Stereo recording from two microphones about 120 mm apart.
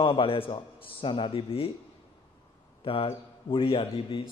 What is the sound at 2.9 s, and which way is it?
A man's voice, 50° left (ahead or behind).